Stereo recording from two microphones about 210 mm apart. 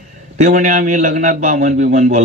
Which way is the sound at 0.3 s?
40° right (ahead or behind).